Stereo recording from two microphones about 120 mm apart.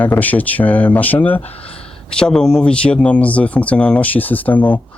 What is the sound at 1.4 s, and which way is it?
Speech, 55° left (ahead or behind).